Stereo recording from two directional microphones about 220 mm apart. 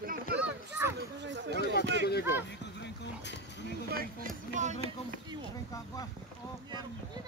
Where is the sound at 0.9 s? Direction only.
55° right (ahead or behind).